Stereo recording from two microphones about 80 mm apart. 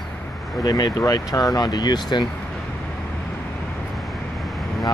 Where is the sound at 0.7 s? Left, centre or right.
Left.